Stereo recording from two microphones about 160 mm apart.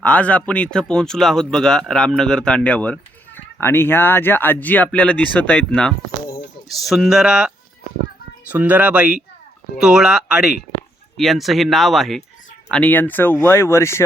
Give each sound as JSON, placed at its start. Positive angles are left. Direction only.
{"t": 0.0, "sound": "speech", "side_deg": 10}